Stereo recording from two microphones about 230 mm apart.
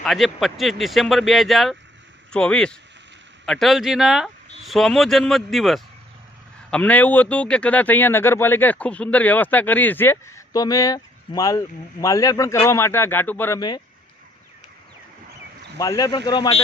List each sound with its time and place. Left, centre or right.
0.0 s speech: centre
15.8 s speech: centre